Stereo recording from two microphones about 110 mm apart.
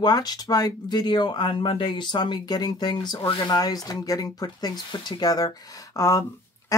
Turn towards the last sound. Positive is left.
turn(degrees=30)  # may be behind; listen again after turning